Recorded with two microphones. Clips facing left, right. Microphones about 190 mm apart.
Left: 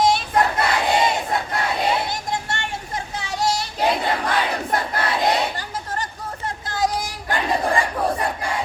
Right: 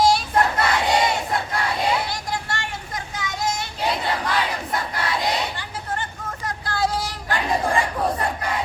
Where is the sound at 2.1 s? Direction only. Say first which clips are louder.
Left 2 dB; 25° left (ahead or behind).